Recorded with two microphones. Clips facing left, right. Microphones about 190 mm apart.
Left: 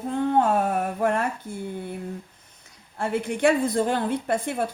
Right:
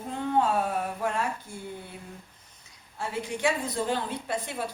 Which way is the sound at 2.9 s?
55° left (ahead or behind).